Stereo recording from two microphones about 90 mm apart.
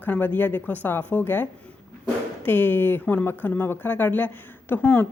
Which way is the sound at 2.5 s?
20° left (ahead or behind).